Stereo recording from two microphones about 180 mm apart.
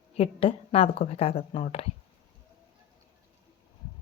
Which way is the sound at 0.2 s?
30° left (ahead or behind).